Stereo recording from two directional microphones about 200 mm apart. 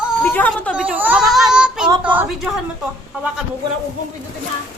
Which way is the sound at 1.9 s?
10° right (ahead or behind).